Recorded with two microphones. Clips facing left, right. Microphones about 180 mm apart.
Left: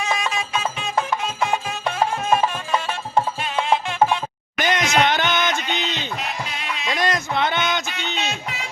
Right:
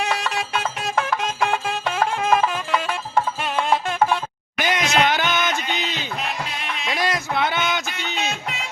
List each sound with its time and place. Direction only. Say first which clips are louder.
0.0 s music: even; 65° right (ahead or behind)
4.5 s a sound: left 1 dB; 10° right (ahead or behind)
6.8 s music: left 1 dB; 5° right (ahead or behind)